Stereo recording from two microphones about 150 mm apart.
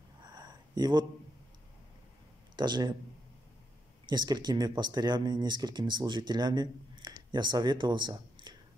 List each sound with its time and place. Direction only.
0.2 s a sound: 30° right (ahead or behind)
2.5 s speech: 30° right (ahead or behind)
4.1 s speech: 30° right (ahead or behind)